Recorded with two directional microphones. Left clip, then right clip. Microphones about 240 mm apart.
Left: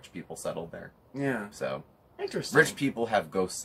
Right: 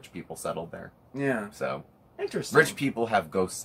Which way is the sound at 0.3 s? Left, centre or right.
Centre.